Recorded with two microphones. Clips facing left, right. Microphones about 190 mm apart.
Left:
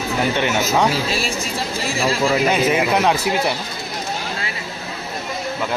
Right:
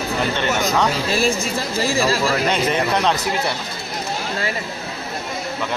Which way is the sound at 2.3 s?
5° left (ahead or behind).